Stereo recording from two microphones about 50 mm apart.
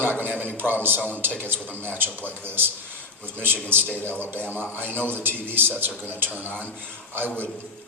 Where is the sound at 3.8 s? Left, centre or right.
Left.